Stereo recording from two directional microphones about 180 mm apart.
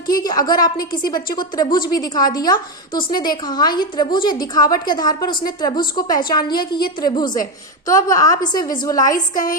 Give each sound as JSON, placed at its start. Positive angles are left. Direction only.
{"t": 0.1, "sound": "a woman's voice", "side_deg": 20}
{"t": 9.1, "sound": "a woman's voice", "side_deg": 50}